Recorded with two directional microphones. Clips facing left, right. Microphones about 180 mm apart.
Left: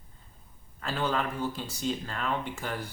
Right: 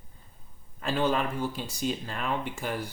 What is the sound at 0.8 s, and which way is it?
Speech, 20° right (ahead or behind).